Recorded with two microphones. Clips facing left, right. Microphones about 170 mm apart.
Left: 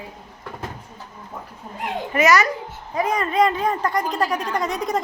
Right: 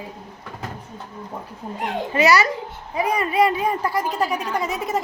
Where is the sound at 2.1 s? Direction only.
35° right (ahead or behind).